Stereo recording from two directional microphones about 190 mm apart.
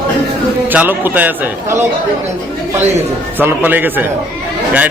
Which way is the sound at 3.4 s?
10° right (ahead or behind).